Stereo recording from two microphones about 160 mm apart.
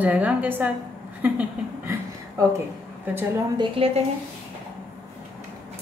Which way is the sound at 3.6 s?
35° right (ahead or behind).